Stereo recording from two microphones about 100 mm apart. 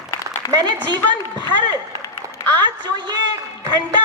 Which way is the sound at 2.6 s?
45° right (ahead or behind).